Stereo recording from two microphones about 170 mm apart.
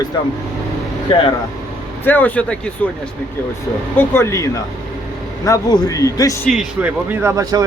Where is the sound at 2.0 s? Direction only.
10° left (ahead or behind).